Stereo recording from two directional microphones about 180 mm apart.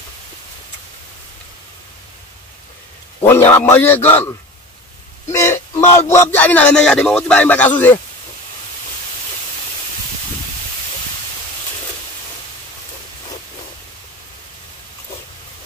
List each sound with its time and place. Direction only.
3.2 s a man's voice: 15° left (ahead or behind)
5.3 s a sound: 15° left (ahead or behind)
6.1 s a man's voice: 10° left (ahead or behind)